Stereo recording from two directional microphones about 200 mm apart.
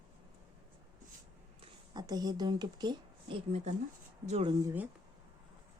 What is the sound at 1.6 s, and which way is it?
Speech, 20° right (ahead or behind).